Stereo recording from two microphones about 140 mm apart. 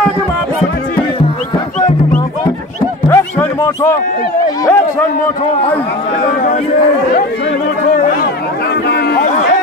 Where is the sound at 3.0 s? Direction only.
20° left (ahead or behind).